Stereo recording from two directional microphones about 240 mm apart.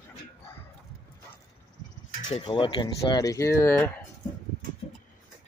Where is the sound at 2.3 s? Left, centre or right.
Left.